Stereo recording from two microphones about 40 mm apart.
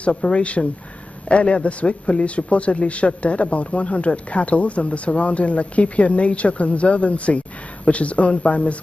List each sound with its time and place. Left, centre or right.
0.1 s a man's voice: left